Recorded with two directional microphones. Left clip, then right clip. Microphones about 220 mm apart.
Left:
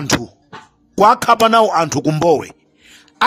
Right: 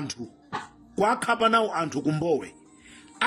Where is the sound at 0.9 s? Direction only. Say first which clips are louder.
Left 13 dB; 45° left (ahead or behind).